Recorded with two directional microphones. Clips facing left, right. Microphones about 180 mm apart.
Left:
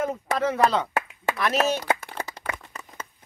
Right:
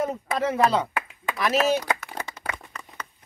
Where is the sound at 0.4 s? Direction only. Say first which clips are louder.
Even; 5° right (ahead or behind).